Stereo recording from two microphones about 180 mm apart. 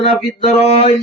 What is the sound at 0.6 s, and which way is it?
Speech, 35° left (ahead or behind).